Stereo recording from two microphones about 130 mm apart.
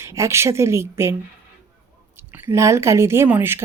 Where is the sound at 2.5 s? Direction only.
20° right (ahead or behind).